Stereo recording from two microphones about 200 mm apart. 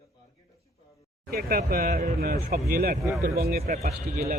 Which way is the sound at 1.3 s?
50° right (ahead or behind).